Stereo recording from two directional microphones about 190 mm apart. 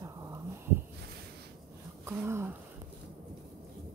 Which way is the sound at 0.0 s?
15° right (ahead or behind).